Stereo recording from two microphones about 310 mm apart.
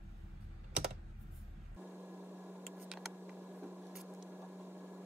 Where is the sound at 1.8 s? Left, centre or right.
Centre.